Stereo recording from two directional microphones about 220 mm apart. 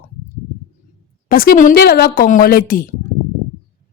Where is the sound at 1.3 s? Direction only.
40° left (ahead or behind).